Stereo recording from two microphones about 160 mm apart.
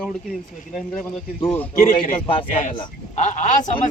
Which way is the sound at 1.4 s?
15° left (ahead or behind).